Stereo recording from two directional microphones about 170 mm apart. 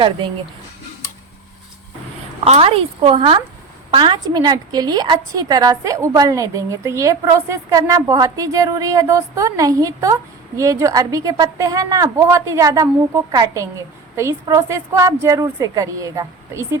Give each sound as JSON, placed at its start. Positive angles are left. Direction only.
{"t": 2.4, "sound": "a woman's voice", "side_deg": -35}